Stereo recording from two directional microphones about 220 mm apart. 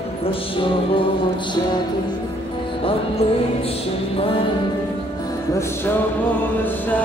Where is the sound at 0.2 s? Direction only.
25° left (ahead or behind).